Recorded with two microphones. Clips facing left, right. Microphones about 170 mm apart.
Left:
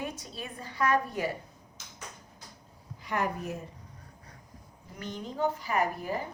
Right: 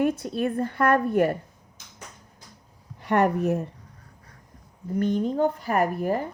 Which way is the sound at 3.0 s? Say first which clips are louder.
Right 10 dB; 65° right (ahead or behind).